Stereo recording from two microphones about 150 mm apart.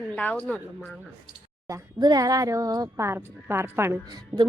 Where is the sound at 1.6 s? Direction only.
25° right (ahead or behind).